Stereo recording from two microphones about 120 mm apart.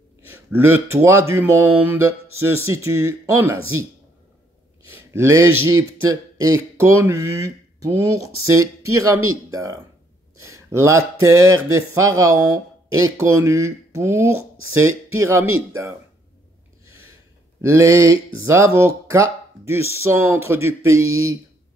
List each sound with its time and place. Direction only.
0.3 s speech: 20° right (ahead or behind)
4.9 s speech: 20° right (ahead or behind)
17.6 s speech: 25° right (ahead or behind)